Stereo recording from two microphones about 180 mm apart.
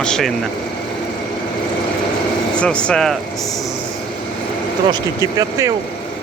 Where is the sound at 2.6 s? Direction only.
5° left (ahead or behind).